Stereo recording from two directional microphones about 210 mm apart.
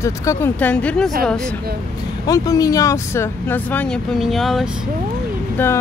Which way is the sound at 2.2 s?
15° left (ahead or behind).